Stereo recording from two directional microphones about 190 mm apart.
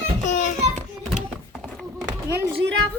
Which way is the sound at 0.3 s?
40° left (ahead or behind).